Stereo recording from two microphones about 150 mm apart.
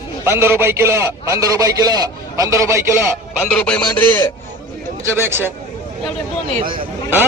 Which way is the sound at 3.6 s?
5° left (ahead or behind).